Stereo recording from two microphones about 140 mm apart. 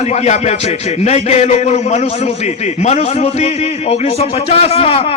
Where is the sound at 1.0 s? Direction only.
50° left (ahead or behind).